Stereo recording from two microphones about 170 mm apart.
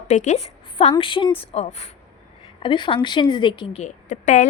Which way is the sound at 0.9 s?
30° left (ahead or behind).